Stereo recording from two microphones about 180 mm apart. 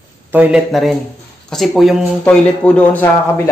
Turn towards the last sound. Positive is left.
turn(degrees=10)  # may be behind; listen again after turning